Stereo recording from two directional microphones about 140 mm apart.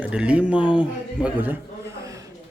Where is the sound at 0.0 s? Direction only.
10° right (ahead or behind).